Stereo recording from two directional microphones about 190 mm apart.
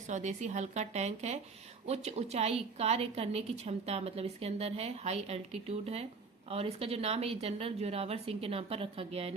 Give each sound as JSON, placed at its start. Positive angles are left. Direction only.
{"t": 0.1, "sound": "a woman's voice", "side_deg": -40}